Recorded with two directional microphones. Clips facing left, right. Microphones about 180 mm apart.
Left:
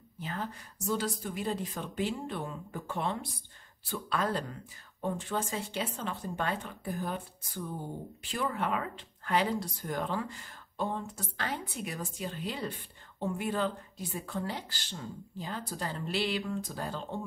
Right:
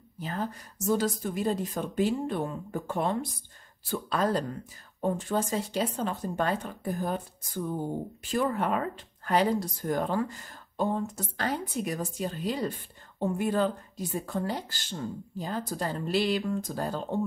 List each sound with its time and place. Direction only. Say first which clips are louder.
0.2 s speech: right 4 dB; 40° right (ahead or behind)